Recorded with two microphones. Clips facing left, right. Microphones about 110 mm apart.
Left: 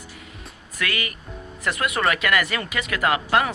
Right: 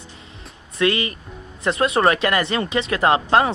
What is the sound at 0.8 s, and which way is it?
Speech, 25° right (ahead or behind).